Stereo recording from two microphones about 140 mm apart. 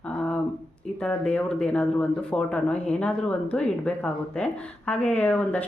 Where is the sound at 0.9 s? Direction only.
5° left (ahead or behind).